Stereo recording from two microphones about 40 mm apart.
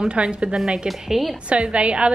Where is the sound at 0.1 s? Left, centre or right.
Right.